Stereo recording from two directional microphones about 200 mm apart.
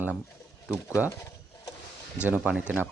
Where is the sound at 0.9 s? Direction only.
15° left (ahead or behind).